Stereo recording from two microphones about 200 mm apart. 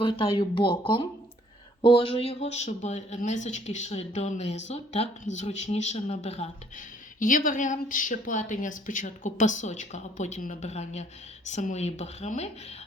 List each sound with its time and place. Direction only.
0.0 s speech: 25° left (ahead or behind)
7.2 s speech: 45° left (ahead or behind)